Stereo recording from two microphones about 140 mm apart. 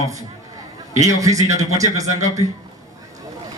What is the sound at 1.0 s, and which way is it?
A man's voice, 25° right (ahead or behind).